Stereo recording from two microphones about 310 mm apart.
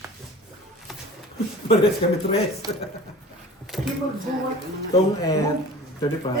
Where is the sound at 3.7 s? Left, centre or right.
Centre.